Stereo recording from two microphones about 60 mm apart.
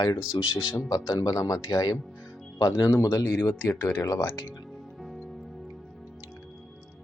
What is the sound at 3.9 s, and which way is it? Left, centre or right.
Speech, left.